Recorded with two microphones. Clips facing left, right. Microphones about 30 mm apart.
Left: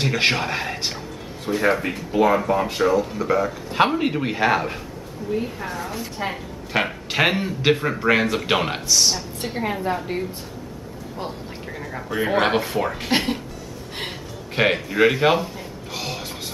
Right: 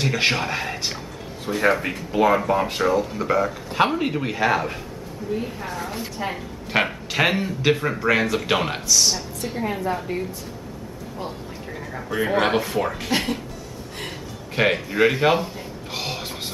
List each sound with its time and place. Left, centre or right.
0.0 s speech: centre
3.7 s speech: centre
6.2 s a woman's voice: centre
6.7 s speech: centre
7.1 s speech: centre
9.7 s a woman's voice: centre
11.9 s speech: centre
14.5 s speech: centre
15.4 s a sound: centre